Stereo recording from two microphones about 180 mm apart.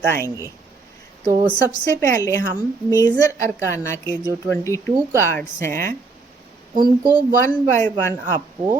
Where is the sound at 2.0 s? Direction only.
15° left (ahead or behind).